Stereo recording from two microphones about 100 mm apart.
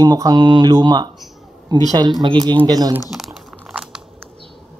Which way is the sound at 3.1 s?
5° right (ahead or behind).